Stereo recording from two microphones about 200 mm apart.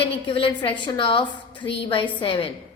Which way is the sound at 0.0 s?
25° left (ahead or behind).